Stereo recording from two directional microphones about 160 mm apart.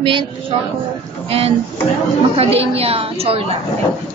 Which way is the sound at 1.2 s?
40° right (ahead or behind).